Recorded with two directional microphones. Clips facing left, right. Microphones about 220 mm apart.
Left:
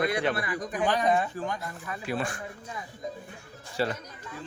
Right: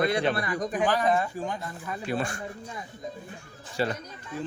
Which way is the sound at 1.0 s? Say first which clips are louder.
Even; centre (ahead or behind).